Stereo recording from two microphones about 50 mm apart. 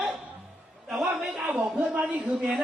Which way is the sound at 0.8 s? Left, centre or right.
Centre.